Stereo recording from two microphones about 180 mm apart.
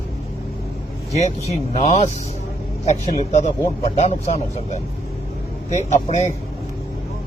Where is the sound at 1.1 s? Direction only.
35° left (ahead or behind).